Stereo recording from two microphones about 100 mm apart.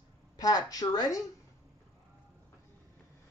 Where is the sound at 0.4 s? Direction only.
40° left (ahead or behind).